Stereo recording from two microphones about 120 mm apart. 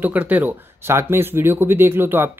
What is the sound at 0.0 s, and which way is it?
Speech, 15° right (ahead or behind).